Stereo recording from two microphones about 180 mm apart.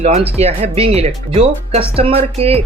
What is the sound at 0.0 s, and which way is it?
Speech, 35° right (ahead or behind).